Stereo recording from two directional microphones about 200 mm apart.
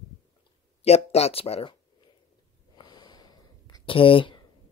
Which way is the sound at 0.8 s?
30° left (ahead or behind).